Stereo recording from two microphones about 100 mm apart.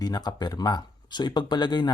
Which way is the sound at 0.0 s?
40° left (ahead or behind).